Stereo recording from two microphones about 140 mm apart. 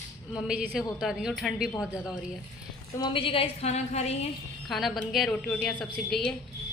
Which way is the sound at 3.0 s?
40° left (ahead or behind).